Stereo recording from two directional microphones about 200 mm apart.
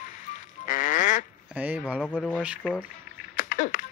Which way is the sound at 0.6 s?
40° left (ahead or behind).